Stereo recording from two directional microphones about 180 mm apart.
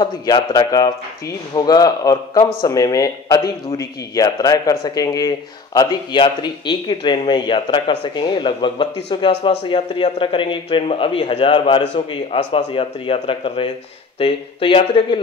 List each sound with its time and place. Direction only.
0.0 s speech: 20° left (ahead or behind)